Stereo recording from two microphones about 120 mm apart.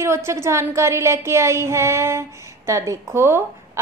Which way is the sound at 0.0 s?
25° right (ahead or behind).